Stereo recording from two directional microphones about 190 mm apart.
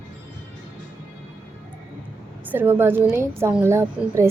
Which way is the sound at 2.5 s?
10° right (ahead or behind).